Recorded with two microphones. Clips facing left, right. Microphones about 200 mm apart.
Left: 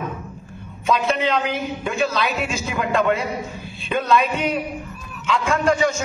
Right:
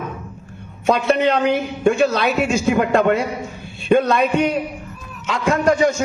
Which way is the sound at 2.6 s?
50° right (ahead or behind).